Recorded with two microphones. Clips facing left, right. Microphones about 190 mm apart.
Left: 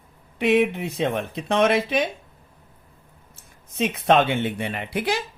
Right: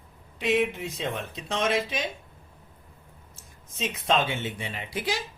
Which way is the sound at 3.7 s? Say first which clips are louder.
Left 7 dB; 60° left (ahead or behind).